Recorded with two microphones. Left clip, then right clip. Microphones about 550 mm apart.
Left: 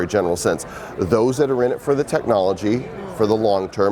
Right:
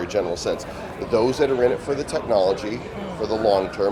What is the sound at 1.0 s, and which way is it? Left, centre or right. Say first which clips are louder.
Speech: left 2 dB; left.